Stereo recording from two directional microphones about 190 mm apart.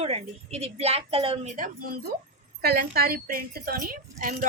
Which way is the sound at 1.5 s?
50° right (ahead or behind).